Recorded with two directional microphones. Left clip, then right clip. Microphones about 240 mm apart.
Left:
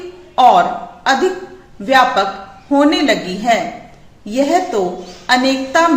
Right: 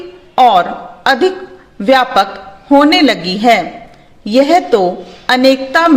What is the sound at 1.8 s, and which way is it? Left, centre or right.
A woman's voice, right.